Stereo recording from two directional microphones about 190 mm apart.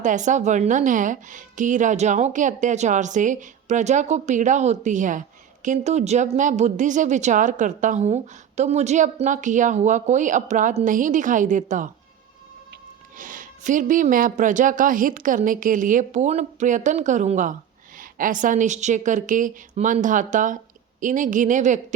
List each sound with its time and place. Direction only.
0.0 s a woman's voice: 40° right (ahead or behind)
13.1 s a woman's voice: 45° right (ahead or behind)